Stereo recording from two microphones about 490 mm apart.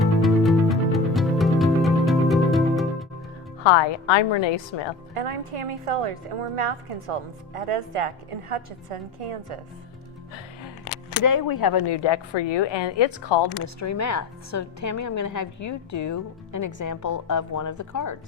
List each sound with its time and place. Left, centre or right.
0.0 s music: centre
3.6 s speech: left
5.1 s a woman's voice: right
11.2 s speech: left
13.7 s a woman's voice: left